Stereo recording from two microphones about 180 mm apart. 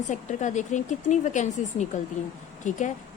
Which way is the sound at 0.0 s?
40° left (ahead or behind).